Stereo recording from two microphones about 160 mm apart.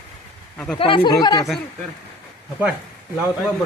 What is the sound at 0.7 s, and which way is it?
Speech, 35° left (ahead or behind).